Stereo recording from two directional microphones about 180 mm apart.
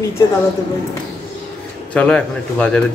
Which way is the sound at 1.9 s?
5° left (ahead or behind).